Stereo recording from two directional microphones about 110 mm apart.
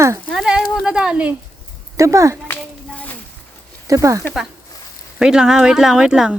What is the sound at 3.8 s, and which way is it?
Speech, 30° right (ahead or behind).